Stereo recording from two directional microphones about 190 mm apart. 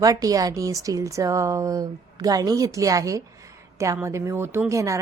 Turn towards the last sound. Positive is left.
turn(degrees=-15)  # may be behind; listen again after turning